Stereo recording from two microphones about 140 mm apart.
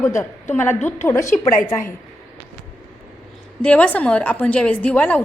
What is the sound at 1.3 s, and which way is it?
Speech, 65° left (ahead or behind).